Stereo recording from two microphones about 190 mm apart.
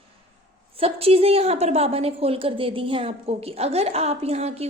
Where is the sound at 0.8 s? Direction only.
30° right (ahead or behind).